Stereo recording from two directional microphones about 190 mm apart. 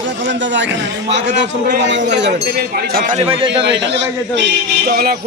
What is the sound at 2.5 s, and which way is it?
Speech, 55° right (ahead or behind).